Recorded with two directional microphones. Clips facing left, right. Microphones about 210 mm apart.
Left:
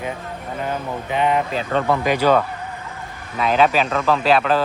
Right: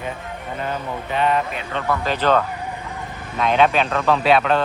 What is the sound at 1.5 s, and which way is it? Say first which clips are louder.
Speech: left 6 dB; 45° left (ahead or behind).